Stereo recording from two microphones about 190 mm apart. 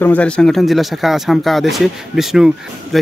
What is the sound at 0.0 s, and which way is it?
Speech, 5° left (ahead or behind).